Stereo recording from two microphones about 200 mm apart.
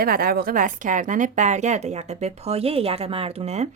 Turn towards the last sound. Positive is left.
turn(degrees=-30)  # may be behind; listen again after turning